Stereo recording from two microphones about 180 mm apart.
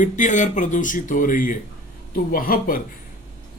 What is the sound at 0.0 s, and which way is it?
Speech, 45° left (ahead or behind).